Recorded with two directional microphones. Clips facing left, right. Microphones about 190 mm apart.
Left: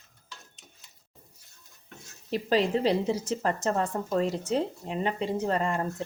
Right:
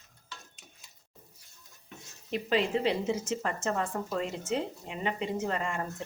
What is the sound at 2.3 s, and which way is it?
A woman's voice, 35° left (ahead or behind).